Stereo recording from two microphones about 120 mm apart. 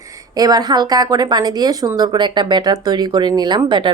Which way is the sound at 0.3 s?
30° right (ahead or behind).